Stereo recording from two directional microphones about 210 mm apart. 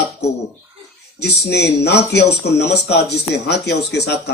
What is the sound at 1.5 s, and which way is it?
Speech, 50° left (ahead or behind).